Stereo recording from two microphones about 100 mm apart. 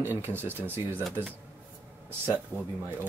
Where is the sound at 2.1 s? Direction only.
20° right (ahead or behind).